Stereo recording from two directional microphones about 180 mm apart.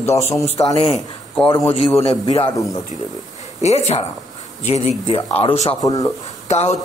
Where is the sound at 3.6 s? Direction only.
35° left (ahead or behind).